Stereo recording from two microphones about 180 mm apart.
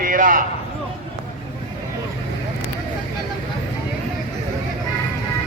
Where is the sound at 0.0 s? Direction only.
50° right (ahead or behind).